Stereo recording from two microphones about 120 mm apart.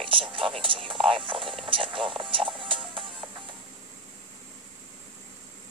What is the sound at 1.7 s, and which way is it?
Speech, 45° right (ahead or behind).